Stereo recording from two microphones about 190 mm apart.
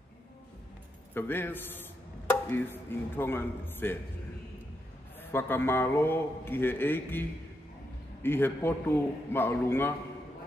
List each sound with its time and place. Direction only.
1.1 s speech: 10° left (ahead or behind)
5.2 s a man's voice: 10° left (ahead or behind)